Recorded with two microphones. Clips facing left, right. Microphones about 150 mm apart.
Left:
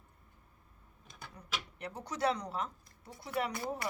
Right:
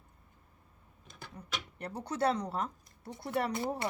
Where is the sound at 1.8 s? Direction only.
30° right (ahead or behind).